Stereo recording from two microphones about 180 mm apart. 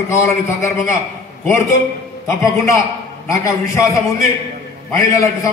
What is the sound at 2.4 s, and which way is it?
A man's voice, 15° left (ahead or behind).